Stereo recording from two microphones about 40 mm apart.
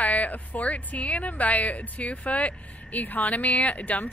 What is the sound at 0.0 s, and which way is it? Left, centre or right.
Speech, left.